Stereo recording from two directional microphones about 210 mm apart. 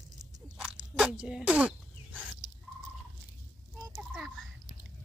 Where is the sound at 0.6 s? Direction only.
5° right (ahead or behind).